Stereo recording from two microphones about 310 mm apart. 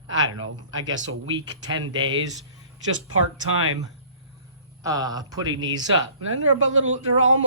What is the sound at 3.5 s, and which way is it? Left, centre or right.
Speech, right.